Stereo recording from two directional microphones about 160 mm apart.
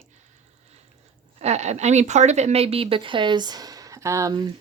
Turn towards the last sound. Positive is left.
turn(degrees=-20)  # may be behind; listen again after turning